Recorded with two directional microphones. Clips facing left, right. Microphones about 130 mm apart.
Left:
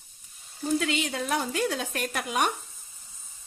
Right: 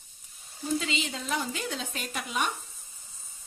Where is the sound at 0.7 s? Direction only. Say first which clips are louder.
Left 7 dB; 60° left (ahead or behind).